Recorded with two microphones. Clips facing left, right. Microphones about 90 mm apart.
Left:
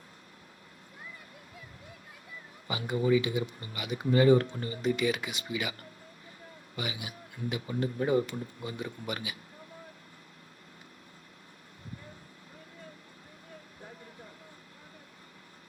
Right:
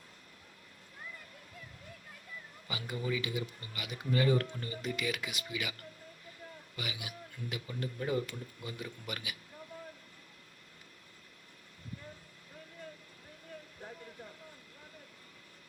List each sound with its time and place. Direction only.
2.6 s speech: 30° left (ahead or behind)
6.7 s speech: 30° left (ahead or behind)